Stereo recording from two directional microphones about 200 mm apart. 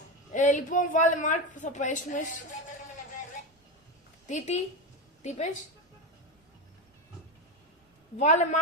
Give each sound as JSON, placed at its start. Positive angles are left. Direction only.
{"t": 0.3, "sound": "speech", "side_deg": 40}
{"t": 4.3, "sound": "a woman's voice", "side_deg": 35}
{"t": 8.1, "sound": "speech", "side_deg": 35}